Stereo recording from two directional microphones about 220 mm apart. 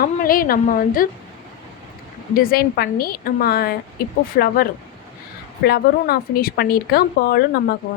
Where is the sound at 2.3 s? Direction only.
40° left (ahead or behind).